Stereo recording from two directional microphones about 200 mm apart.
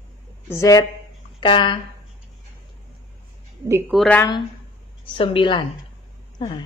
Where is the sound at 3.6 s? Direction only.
15° right (ahead or behind).